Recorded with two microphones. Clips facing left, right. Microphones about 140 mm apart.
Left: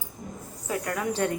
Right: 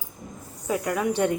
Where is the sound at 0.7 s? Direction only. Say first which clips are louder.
Right 4 dB; 20° right (ahead or behind).